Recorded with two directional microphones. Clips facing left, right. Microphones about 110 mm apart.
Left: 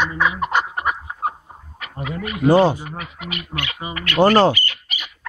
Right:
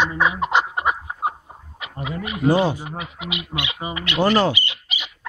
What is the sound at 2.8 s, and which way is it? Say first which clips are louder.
Speech: right 1 dB; 15° right (ahead or behind).